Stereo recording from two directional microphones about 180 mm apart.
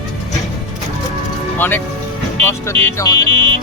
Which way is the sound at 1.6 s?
10° left (ahead or behind).